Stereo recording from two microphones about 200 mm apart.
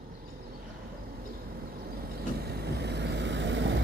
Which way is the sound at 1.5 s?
50° right (ahead or behind).